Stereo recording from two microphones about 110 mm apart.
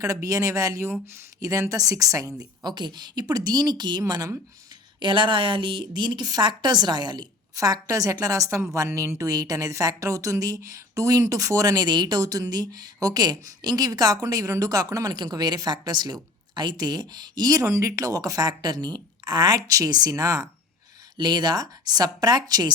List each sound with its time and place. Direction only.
0.0 s a woman's voice: 30° right (ahead or behind)
2.6 s a woman's voice: 40° right (ahead or behind)
4.9 s a woman's voice: 45° right (ahead or behind)